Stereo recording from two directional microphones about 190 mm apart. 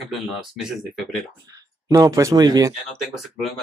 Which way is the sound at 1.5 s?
20° right (ahead or behind).